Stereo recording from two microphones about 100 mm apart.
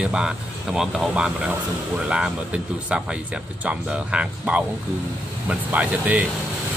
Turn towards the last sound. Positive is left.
turn(degrees=-15)  # may be behind; listen again after turning